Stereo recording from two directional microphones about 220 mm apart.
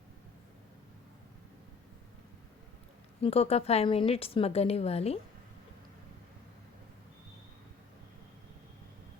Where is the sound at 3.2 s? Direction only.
25° left (ahead or behind).